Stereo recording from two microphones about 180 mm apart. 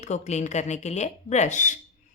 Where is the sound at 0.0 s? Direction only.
40° left (ahead or behind).